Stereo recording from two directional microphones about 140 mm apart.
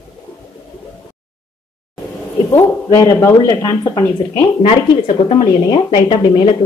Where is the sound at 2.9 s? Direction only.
20° left (ahead or behind).